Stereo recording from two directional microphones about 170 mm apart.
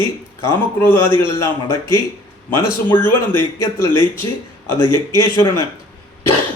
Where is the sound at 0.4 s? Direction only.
15° left (ahead or behind).